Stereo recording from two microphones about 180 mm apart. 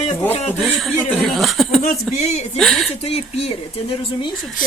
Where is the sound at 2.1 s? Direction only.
40° left (ahead or behind).